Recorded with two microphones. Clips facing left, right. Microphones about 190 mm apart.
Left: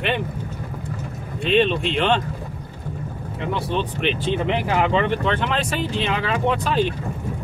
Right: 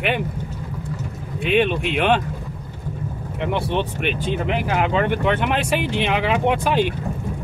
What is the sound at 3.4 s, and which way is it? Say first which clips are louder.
Speech: right 2 dB; 20° right (ahead or behind).